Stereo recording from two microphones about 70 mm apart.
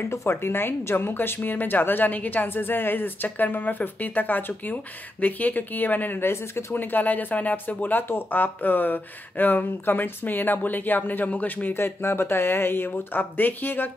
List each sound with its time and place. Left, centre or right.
0.0 s speech: left
6.2 s speech: left